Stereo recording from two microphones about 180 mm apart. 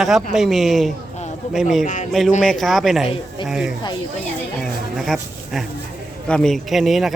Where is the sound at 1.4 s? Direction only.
40° left (ahead or behind).